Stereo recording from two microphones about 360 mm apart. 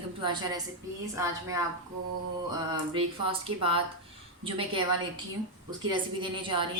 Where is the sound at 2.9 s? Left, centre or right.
Centre.